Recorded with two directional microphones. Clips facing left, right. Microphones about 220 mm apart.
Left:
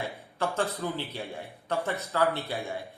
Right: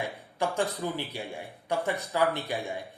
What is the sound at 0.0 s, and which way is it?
A man's voice, 15° right (ahead or behind).